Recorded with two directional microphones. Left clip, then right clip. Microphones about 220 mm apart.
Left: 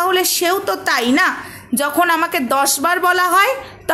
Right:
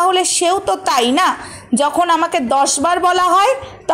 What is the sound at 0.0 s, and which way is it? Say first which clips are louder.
A woman's voice: right 2 dB; 10° right (ahead or behind).